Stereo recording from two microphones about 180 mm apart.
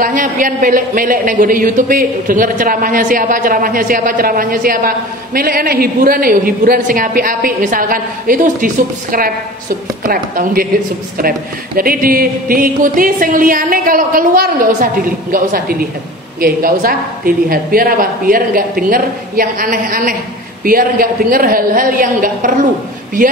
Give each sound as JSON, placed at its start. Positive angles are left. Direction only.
{"t": 0.0, "sound": "a man's voice", "side_deg": -50}
{"t": 10.0, "sound": "a man's voice", "side_deg": -50}